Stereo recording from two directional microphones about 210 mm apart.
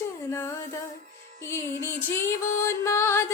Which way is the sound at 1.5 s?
15° left (ahead or behind).